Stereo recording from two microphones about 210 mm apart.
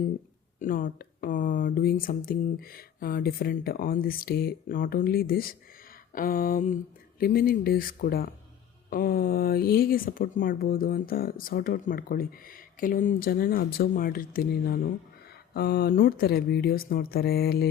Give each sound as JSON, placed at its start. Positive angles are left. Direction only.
{"t": 0.6, "sound": "speech", "side_deg": 40}